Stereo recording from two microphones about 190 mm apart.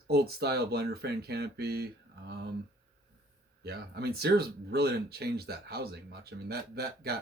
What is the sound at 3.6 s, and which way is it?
Speech, 60° right (ahead or behind).